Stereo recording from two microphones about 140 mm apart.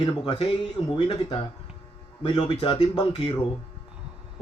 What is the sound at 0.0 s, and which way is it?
A man's voice, 40° left (ahead or behind).